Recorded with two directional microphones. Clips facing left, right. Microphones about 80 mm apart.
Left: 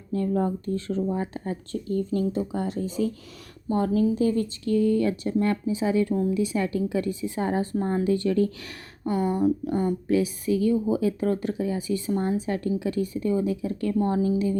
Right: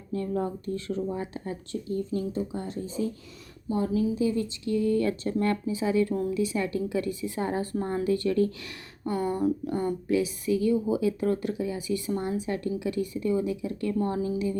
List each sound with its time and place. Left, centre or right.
0.1 s speech: left
2.1 s speech: left
3.7 s speech: left
4.2 s speech: left
4.9 s a woman's voice: left